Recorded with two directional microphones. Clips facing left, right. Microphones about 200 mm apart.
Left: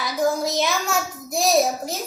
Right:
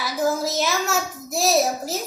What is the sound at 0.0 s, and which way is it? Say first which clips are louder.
A child's voice: left 1 dB; centre (ahead or behind).